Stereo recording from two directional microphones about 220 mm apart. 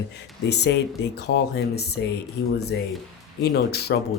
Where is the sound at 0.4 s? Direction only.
50° left (ahead or behind).